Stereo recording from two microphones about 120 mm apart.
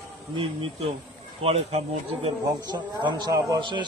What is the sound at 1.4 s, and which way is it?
Speech, 60° right (ahead or behind).